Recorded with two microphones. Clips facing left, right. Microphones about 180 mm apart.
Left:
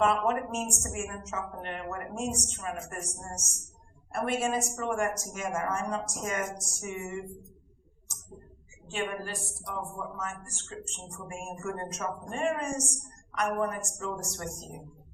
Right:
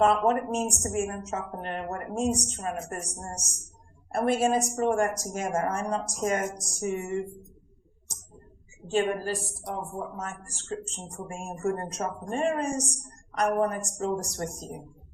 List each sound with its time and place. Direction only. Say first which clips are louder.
0.0 s a woman's voice: right 4 dB; 40° right (ahead or behind)
8.9 s a woman's voice: right 8 dB; 35° right (ahead or behind)